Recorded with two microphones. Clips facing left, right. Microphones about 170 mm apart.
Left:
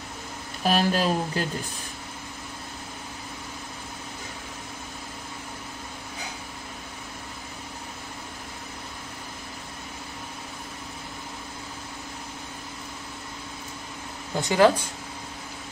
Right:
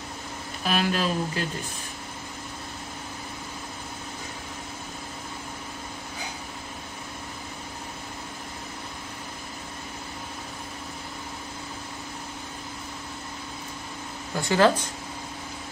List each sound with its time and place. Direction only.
0.7 s speech: 40° left (ahead or behind)
14.4 s speech: 15° left (ahead or behind)